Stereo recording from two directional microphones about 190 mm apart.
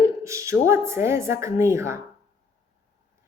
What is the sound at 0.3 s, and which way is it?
Speech, 15° right (ahead or behind).